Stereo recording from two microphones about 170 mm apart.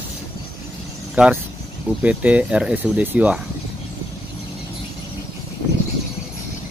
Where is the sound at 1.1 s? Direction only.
5° right (ahead or behind).